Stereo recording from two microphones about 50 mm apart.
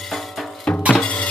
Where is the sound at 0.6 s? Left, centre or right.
Left.